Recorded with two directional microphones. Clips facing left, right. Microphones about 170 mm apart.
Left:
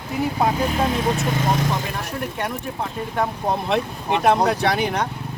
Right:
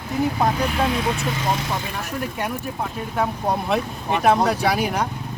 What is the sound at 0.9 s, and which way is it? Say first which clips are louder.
Speech: left 2 dB; 45° left (ahead or behind).